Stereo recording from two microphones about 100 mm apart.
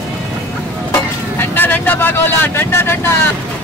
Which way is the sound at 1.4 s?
20° left (ahead or behind).